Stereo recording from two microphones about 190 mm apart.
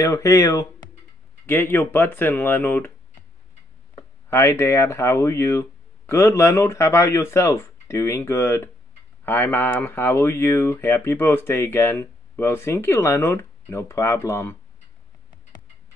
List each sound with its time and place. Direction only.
0.0 s speech: 15° left (ahead or behind)
4.3 s speech: 15° left (ahead or behind)